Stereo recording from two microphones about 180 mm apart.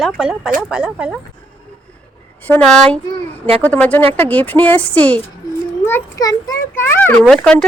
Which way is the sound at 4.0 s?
30° right (ahead or behind).